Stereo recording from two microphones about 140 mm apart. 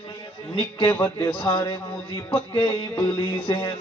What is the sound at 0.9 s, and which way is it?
Speech, 10° left (ahead or behind).